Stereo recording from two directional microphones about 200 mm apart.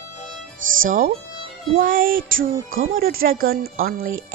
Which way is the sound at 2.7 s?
80° right.